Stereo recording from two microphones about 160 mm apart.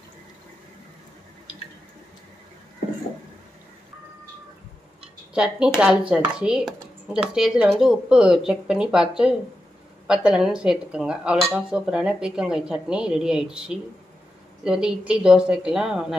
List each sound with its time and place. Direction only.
5.3 s speech: 5° right (ahead or behind)